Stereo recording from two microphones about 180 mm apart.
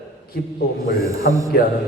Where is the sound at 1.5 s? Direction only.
60° left (ahead or behind).